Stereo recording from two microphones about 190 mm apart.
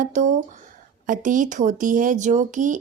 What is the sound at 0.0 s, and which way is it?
Speech, 40° right (ahead or behind).